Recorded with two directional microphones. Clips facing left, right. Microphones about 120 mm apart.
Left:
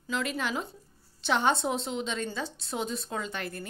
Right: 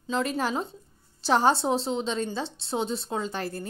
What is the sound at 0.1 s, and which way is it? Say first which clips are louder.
A woman's voice: right 4 dB; 35° right (ahead or behind).